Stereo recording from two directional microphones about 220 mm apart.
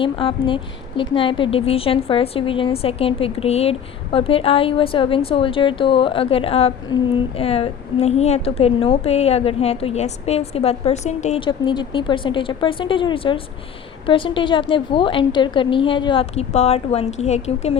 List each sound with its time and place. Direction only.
0.0 s a woman's voice: 25° left (ahead or behind)